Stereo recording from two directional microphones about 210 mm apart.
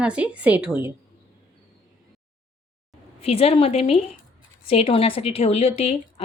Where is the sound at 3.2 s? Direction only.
30° left (ahead or behind).